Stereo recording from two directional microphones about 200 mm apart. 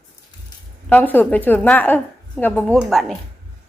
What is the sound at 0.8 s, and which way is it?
A woman's voice, 10° left (ahead or behind).